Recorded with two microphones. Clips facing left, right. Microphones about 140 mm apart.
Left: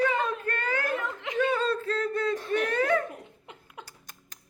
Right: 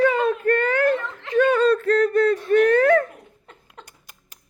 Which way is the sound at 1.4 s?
75° right (ahead or behind).